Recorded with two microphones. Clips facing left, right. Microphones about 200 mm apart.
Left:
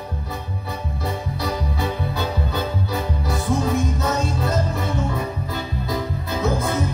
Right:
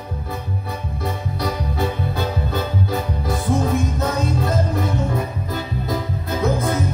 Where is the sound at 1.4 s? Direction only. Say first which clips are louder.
Right 3 dB; 50° right (ahead or behind).